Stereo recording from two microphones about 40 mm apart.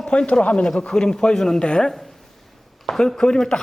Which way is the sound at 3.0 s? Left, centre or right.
Centre.